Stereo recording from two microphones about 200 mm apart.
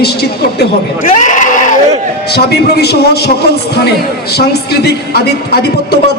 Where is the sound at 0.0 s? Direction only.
55° left (ahead or behind).